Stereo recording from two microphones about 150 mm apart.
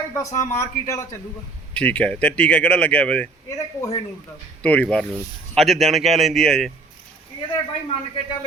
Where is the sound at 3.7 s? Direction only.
20° left (ahead or behind).